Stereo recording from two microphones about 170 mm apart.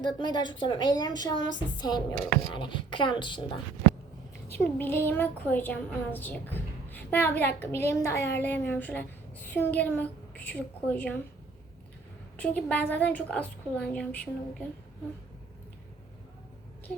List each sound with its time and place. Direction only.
0.0 s a woman's voice: 25° left (ahead or behind)
4.4 s a woman's voice: 10° left (ahead or behind)
12.4 s a woman's voice: 10° left (ahead or behind)